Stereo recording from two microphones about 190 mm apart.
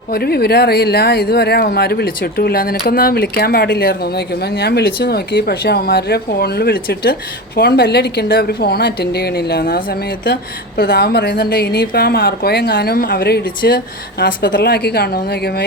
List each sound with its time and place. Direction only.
0.1 s speech: 55° left (ahead or behind)